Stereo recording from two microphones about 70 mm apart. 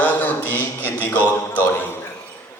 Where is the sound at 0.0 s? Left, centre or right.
Left.